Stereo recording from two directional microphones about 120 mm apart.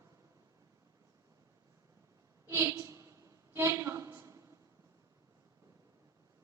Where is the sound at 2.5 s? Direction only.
25° right (ahead or behind).